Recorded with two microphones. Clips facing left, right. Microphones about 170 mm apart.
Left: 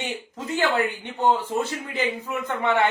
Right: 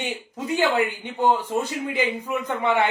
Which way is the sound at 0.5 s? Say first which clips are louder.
Right 1 dB; 20° right (ahead or behind).